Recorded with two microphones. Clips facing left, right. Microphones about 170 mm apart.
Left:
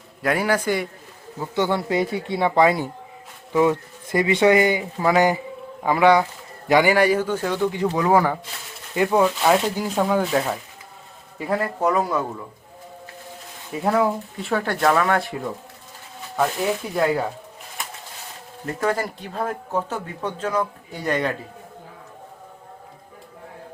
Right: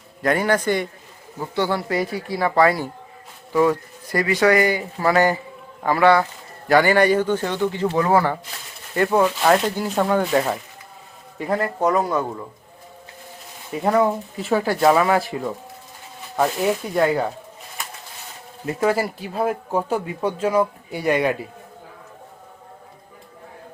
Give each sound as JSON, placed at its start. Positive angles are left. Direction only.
{"t": 0.2, "sound": "speech", "side_deg": 5}
{"t": 1.5, "sound": "speech", "side_deg": 20}
{"t": 13.7, "sound": "speech", "side_deg": 0}
{"t": 18.6, "sound": "speech", "side_deg": -10}